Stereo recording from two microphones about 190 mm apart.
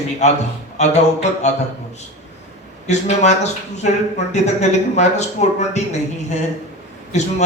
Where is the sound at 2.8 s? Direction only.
35° left (ahead or behind).